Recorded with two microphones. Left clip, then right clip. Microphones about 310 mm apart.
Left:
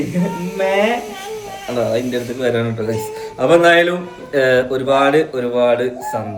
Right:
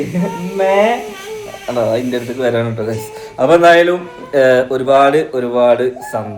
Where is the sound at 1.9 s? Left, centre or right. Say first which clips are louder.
Right 2 dB; centre.